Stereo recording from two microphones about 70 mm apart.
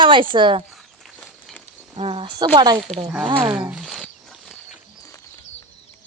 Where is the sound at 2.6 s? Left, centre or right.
Right.